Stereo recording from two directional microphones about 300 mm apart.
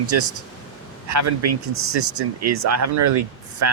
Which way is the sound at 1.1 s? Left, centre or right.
Right.